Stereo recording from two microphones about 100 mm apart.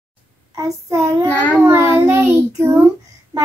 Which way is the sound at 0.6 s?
30° right (ahead or behind).